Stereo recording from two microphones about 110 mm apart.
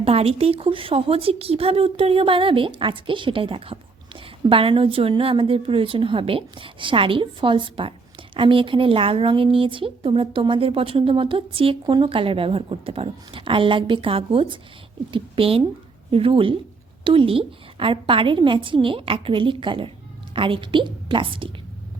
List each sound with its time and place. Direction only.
0.0 s a woman's voice: 65° right (ahead or behind)